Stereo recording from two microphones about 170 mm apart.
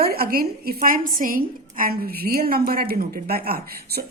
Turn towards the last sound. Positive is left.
turn(degrees=-60)  # may be behind; listen again after turning